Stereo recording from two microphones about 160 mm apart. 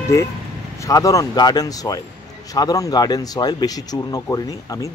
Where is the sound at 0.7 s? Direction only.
20° left (ahead or behind).